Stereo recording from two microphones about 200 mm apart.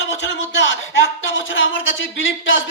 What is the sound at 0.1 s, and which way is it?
Speech, 65° left (ahead or behind).